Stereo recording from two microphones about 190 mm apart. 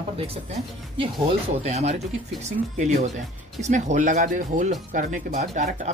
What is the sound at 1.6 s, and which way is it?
Speech, 35° right (ahead or behind).